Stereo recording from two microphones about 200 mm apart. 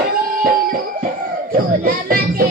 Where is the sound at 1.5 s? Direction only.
45° right (ahead or behind).